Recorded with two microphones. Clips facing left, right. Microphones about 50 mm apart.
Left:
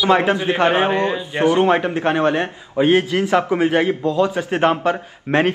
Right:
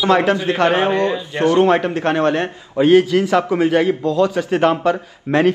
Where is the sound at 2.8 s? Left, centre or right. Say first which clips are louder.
Right 3 dB; left.